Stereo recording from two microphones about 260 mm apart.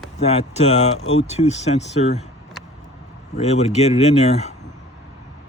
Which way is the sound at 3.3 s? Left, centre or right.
Left.